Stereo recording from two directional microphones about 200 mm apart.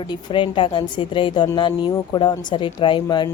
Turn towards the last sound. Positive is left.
turn(degrees=25)  # may be behind; listen again after turning